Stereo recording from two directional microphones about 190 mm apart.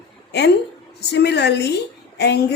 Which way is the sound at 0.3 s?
60° left (ahead or behind).